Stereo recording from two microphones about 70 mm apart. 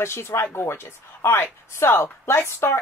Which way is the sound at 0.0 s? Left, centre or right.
Left.